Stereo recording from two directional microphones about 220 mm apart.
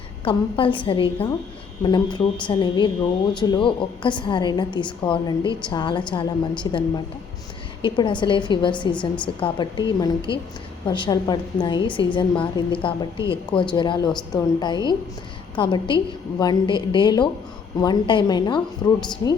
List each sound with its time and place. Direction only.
0.3 s a woman's voice: 25° left (ahead or behind)